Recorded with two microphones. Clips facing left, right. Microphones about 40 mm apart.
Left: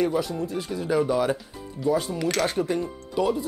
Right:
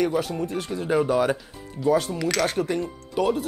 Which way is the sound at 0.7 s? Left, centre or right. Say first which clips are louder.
Right 1 dB; right.